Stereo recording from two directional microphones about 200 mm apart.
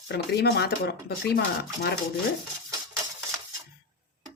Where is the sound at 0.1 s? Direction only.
55° left (ahead or behind).